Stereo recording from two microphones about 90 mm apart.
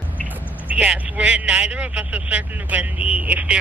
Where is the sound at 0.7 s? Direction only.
15° right (ahead or behind).